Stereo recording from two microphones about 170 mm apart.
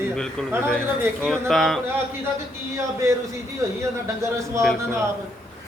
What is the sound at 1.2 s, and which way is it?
Speech, centre (ahead or behind).